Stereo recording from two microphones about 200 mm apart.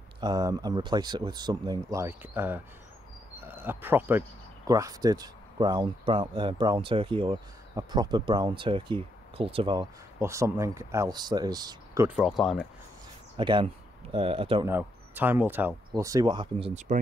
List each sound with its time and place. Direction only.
0.2 s speech: 20° right (ahead or behind); by 12.6 s centre (ahead or behind)
13.4 s speech: 25° right (ahead or behind)
14.7 s speech: 10° right (ahead or behind); by 17.0 s 40° right (ahead or behind)